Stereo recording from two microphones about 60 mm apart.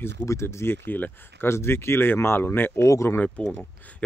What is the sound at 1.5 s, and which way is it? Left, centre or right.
Speech, left.